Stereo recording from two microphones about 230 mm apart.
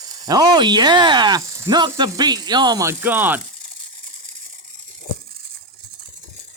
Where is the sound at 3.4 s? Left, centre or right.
Right.